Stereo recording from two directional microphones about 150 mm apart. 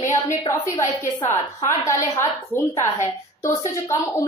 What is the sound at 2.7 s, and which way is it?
Speech, 50° left (ahead or behind).